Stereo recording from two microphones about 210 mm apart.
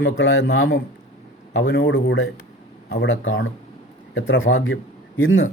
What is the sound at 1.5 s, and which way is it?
Speech, 45° left (ahead or behind).